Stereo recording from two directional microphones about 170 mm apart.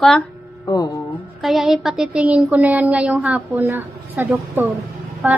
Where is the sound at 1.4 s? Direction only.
Centre (ahead or behind).